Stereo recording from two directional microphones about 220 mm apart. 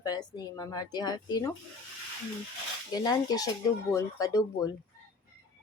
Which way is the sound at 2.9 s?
15° left (ahead or behind).